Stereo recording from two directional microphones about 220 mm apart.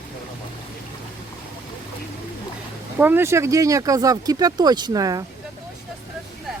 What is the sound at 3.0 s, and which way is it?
Speech, 10° right (ahead or behind).